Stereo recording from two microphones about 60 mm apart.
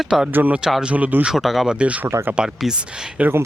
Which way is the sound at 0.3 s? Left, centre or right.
Right.